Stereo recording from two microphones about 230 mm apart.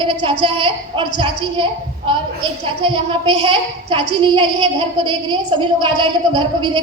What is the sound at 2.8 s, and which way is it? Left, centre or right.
A woman's voice, right.